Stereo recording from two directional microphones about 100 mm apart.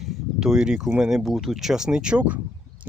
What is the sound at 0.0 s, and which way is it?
Speech, 5° right (ahead or behind).